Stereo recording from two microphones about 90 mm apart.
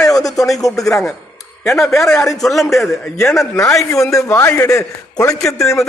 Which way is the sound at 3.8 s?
35° left (ahead or behind).